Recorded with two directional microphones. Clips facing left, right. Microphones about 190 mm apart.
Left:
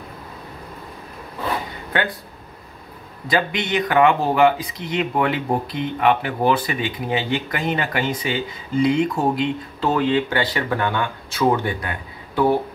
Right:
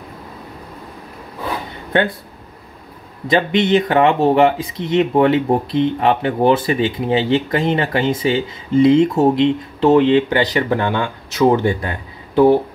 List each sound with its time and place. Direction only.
3.3 s speech: 25° right (ahead or behind)